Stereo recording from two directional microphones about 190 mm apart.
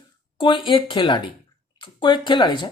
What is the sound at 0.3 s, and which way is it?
Speech, 25° left (ahead or behind).